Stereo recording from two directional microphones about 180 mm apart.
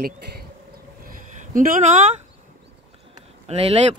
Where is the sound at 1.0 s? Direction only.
45° right (ahead or behind).